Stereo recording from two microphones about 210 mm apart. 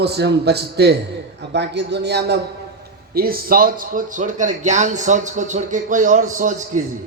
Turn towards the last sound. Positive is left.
turn(degrees=-35)  # may be behind; listen again after turning